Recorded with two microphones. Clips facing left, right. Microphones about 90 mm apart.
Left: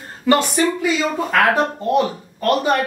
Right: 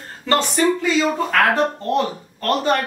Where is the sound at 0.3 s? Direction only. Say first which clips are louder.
Left 1 dB; 15° left (ahead or behind).